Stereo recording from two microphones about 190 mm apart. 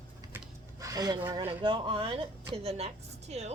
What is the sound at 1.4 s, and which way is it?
A woman's voice, 30° right (ahead or behind).